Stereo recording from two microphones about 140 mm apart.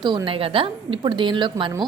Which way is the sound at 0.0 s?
30° right (ahead or behind).